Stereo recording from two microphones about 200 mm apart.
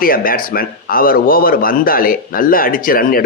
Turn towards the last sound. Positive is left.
turn(degrees=45)  # may be behind; listen again after turning